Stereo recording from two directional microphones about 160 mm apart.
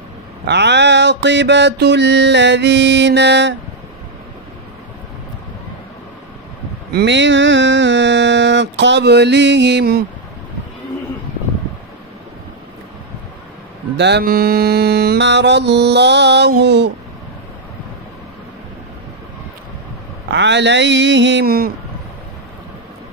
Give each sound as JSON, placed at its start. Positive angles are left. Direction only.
{"t": 0.5, "sound": "mantra", "side_deg": -90}
{"t": 6.9, "sound": "speech", "side_deg": -90}
{"t": 8.0, "sound": "a sound", "side_deg": -90}
{"t": 13.9, "sound": "mantra", "side_deg": -90}
{"t": 20.2, "sound": "mantra", "side_deg": -90}